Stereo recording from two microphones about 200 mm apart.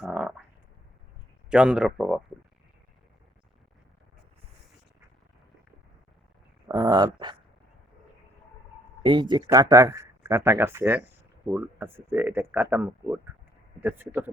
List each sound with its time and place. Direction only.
0.0 s a sound: centre (ahead or behind)
1.5 s speech: 5° right (ahead or behind)
6.7 s dog: 20° right (ahead or behind)
9.0 s speech: 25° right (ahead or behind)